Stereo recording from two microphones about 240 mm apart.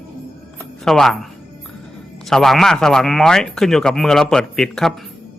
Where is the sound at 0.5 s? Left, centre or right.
Centre.